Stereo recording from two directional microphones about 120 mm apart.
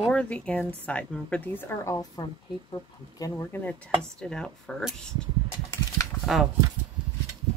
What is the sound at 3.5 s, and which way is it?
Speech, 10° left (ahead or behind).